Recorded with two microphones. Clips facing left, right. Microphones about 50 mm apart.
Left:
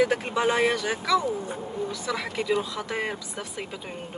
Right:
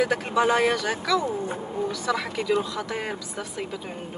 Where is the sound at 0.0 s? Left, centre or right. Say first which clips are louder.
Right 1 dB; left.